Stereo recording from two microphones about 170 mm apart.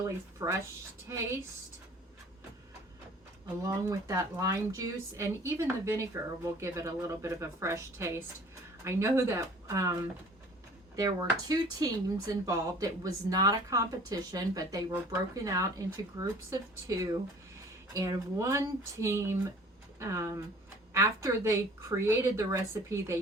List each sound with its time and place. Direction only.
0.0 s speech: 15° right (ahead or behind)
3.6 s speech: 20° right (ahead or behind)
10.9 s speech: 20° right (ahead or behind)